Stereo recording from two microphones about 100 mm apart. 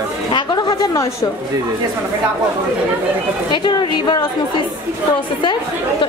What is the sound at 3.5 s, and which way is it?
Speech, 50° left (ahead or behind).